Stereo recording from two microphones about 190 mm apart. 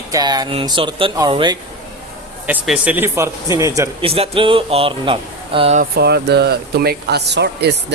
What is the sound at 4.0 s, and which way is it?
Speech, 30° right (ahead or behind).